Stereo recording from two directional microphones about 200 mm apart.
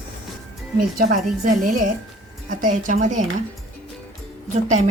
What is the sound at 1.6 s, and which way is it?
Speech, 40° right (ahead or behind).